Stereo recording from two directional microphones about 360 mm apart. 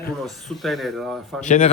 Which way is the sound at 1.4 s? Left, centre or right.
Centre.